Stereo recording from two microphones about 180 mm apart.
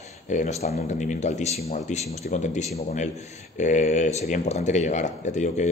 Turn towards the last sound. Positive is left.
turn(degrees=40)  # may be behind; listen again after turning